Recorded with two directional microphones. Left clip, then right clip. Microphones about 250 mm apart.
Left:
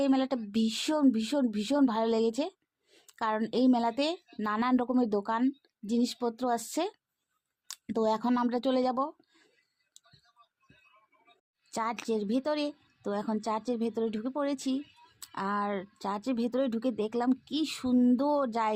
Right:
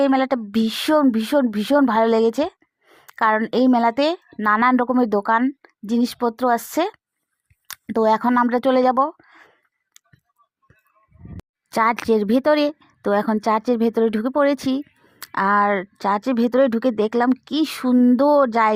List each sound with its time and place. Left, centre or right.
0.0 s speech: right
10.0 s tick: right
11.7 s a woman's voice: right